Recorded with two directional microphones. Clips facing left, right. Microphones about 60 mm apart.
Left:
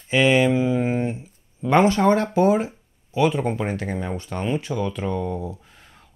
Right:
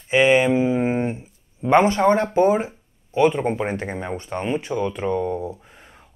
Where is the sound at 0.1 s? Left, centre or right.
Right.